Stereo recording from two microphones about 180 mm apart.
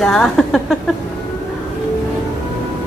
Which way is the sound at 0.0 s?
5° left (ahead or behind).